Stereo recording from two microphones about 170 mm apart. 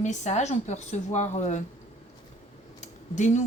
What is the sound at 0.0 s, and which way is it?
Speech, 45° left (ahead or behind).